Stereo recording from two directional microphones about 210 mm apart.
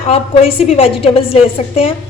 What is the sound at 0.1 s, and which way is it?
A woman's voice, 25° left (ahead or behind).